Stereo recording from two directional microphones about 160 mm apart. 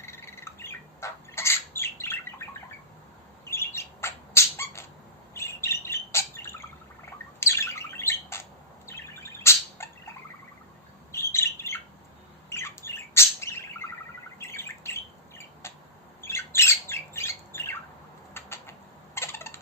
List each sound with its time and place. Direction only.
0.0 s bird: 15° left (ahead or behind)
3.5 s squawk: 15° left (ahead or behind)
5.3 s bird: 15° left (ahead or behind)
11.1 s bird: 15° left (ahead or behind)
15.6 s a sound: 15° left (ahead or behind)
16.2 s squawk: 15° left (ahead or behind)
18.3 s a sound: 15° left (ahead or behind)